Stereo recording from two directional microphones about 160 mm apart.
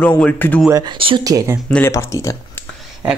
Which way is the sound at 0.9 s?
35° right (ahead or behind).